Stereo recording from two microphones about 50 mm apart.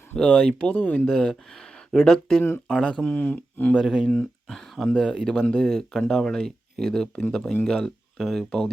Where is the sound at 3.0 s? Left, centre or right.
Left.